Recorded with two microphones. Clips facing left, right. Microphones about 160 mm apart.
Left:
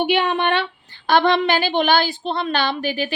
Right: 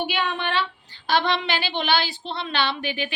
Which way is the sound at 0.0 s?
60° left (ahead or behind).